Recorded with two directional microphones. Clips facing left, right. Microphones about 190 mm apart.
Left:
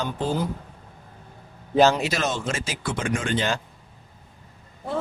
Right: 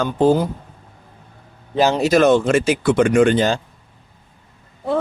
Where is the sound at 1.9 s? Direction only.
45° right (ahead or behind); by 3.4 s 65° right (ahead or behind).